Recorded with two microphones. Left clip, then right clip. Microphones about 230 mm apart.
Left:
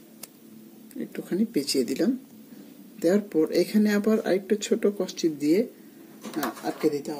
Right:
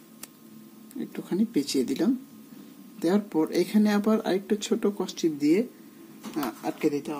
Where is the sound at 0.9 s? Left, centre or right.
Right.